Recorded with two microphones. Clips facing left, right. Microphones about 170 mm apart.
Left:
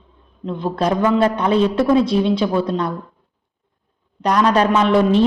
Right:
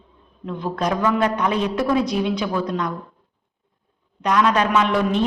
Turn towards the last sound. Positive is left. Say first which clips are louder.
# left 5 dB
turn(degrees=30)  # may be behind; listen again after turning